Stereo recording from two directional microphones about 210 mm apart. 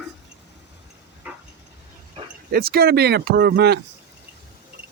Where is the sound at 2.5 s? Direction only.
50° right (ahead or behind).